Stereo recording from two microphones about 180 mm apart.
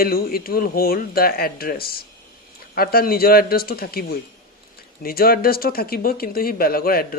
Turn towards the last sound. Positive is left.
turn(degrees=55)  # may be behind; listen again after turning